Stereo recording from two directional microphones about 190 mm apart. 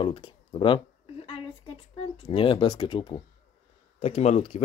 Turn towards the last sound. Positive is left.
turn(degrees=35)  # may be behind; listen again after turning